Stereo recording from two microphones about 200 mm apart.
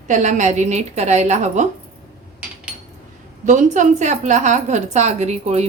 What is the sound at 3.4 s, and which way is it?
A woman's voice, 40° right (ahead or behind).